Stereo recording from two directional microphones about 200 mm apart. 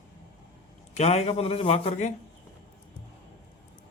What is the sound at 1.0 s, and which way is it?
A man's voice, 30° left (ahead or behind).